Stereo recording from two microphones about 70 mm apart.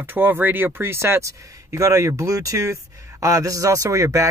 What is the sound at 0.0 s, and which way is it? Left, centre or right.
A man's voice, right.